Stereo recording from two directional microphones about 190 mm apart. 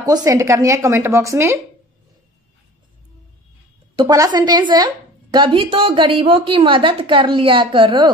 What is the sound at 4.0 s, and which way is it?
A woman's voice, 20° right (ahead or behind).